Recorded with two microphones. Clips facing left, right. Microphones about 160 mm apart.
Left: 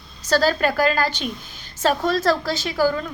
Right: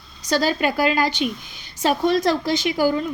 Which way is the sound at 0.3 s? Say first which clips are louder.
Left 1 dB; 15° right (ahead or behind).